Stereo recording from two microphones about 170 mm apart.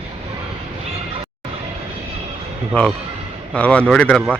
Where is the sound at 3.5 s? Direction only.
5° left (ahead or behind).